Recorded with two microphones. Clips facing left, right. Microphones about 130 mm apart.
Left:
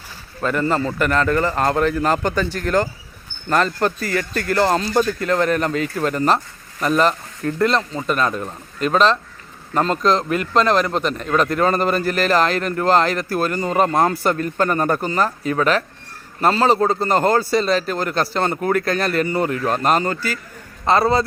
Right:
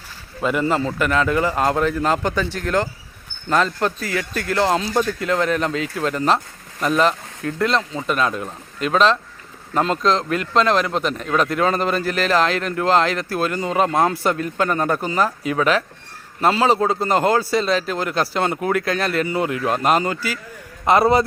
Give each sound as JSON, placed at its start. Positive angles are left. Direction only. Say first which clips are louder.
{"t": 0.4, "sound": "a man's voice", "louder": "even", "side_deg": -10}